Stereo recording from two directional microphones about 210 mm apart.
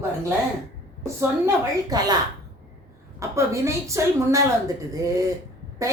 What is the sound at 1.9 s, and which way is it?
Speech, 20° right (ahead or behind).